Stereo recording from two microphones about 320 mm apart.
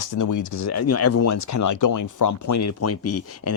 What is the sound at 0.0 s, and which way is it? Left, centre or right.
Speech, left.